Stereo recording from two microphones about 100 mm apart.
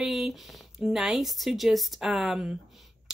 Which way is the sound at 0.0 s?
5° right (ahead or behind).